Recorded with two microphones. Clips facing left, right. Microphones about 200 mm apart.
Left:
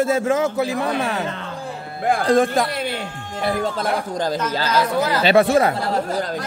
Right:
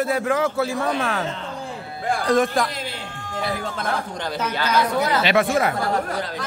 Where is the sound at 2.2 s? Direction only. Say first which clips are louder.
Left 2 dB; 30° left (ahead or behind).